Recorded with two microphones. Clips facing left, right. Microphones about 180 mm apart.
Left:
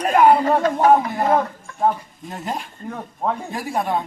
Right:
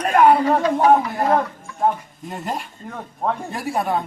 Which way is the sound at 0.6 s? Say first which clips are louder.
Even; 50° left (ahead or behind).